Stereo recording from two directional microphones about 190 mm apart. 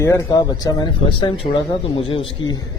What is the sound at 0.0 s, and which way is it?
Speech, 15° left (ahead or behind).